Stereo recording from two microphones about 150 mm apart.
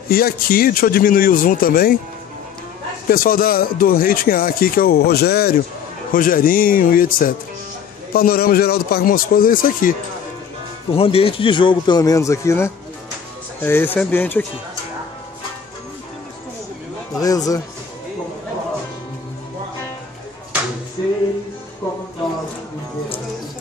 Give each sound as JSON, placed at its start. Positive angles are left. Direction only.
{"t": 0.1, "sound": "a man's voice", "side_deg": 85}
{"t": 3.1, "sound": "a man's voice", "side_deg": 75}
{"t": 6.1, "sound": "a man's voice", "side_deg": 70}
{"t": 8.1, "sound": "a man's voice", "side_deg": 85}
{"t": 10.9, "sound": "a man's voice", "side_deg": 40}
{"t": 17.2, "sound": "speech", "side_deg": 25}
{"t": 21.0, "sound": "music", "side_deg": 25}